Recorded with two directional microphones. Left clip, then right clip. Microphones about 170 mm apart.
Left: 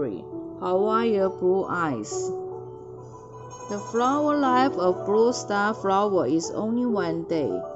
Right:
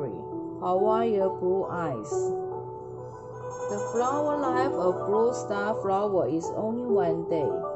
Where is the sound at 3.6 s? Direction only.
50° left (ahead or behind).